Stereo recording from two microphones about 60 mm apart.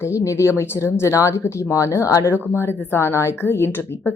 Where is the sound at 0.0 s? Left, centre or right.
Left.